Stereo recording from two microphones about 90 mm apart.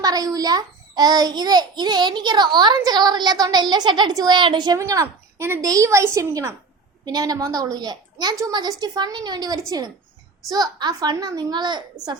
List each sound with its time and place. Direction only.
0.0 s a child's voice: 45° right (ahead or behind)
4.8 s a woman's voice: 35° right (ahead or behind)
7.0 s a child's voice: 45° right (ahead or behind)